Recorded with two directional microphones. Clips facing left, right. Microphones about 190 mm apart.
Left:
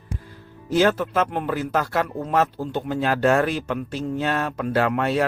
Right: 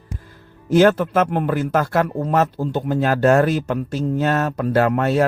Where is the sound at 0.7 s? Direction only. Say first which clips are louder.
Right 5 dB; 50° right (ahead or behind).